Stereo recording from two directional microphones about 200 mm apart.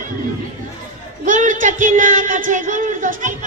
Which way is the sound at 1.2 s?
40° right (ahead or behind).